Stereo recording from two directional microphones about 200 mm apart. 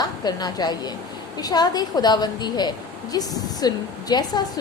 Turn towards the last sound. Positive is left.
turn(degrees=20)  # may be behind; listen again after turning